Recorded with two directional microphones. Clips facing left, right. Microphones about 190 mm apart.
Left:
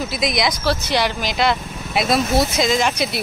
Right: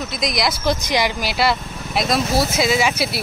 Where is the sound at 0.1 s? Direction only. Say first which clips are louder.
Even; centre (ahead or behind).